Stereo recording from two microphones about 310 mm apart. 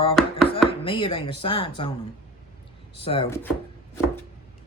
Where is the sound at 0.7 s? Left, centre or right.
Centre.